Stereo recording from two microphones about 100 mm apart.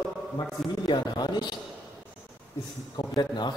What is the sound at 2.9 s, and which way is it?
Speech, 45° left (ahead or behind).